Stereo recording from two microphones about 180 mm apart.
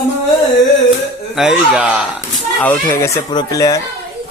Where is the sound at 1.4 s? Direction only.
5° right (ahead or behind).